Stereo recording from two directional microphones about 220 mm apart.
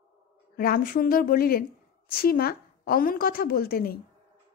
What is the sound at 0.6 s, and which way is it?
A woman's voice, 40° left (ahead or behind).